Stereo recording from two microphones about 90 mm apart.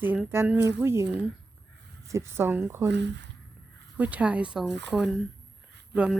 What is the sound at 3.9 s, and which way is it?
Speech, 15° right (ahead or behind).